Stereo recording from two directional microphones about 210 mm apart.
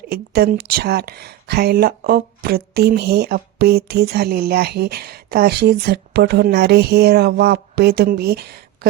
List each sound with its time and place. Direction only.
0.1 s speech: 50° right (ahead or behind)